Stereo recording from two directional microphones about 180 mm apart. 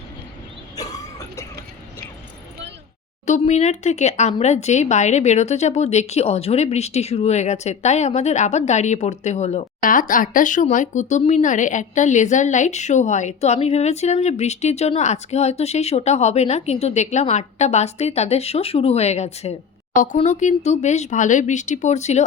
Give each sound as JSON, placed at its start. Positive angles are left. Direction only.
{"t": 0.8, "sound": "cough", "side_deg": 20}
{"t": 3.2, "sound": "speech", "side_deg": 40}